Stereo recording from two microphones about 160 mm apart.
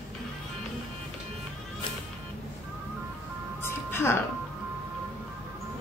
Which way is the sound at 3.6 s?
15° left (ahead or behind).